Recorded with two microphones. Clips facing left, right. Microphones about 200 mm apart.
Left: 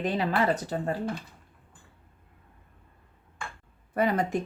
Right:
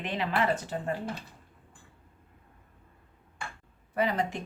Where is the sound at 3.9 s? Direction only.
50° left (ahead or behind).